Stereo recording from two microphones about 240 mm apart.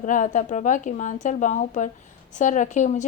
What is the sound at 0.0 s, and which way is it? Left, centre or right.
Speech, left.